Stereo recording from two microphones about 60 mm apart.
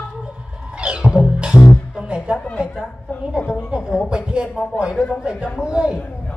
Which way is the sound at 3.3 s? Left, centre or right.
Centre.